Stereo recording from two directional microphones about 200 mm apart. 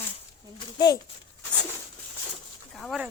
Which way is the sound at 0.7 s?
20° left (ahead or behind).